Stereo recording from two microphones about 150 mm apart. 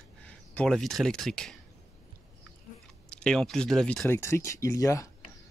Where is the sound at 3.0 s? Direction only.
5° left (ahead or behind).